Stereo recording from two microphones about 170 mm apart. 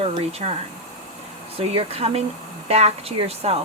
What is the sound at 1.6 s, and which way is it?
Speech, 35° right (ahead or behind).